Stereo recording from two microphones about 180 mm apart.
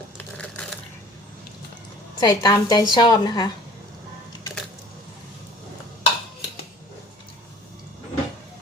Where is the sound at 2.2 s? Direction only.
25° left (ahead or behind).